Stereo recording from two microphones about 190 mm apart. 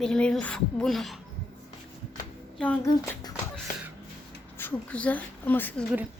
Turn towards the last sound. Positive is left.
turn(degrees=10)  # may be behind; listen again after turning